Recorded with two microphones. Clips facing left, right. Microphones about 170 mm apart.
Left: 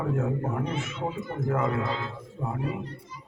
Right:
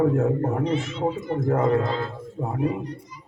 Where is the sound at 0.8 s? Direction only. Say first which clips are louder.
Right 6 dB; 35° right (ahead or behind).